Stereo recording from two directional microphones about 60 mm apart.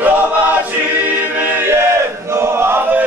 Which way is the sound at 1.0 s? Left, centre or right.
Right.